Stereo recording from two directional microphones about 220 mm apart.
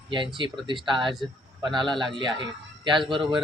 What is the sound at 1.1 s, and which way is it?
Speech, centre (ahead or behind).